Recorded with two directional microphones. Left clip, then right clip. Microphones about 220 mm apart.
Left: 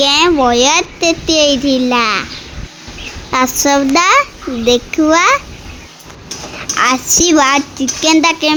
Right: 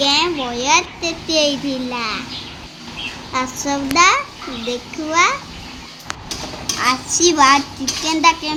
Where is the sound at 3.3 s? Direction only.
35° left (ahead or behind).